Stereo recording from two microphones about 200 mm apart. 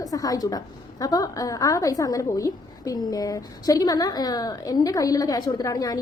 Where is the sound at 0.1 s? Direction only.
15° left (ahead or behind).